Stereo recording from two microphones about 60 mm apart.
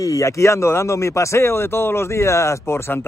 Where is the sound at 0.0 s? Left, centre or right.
Left.